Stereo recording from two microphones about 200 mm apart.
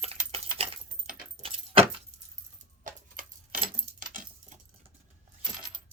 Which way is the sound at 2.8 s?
45° right (ahead or behind).